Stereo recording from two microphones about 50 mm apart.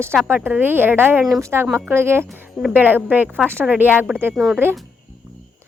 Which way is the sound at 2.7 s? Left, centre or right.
Right.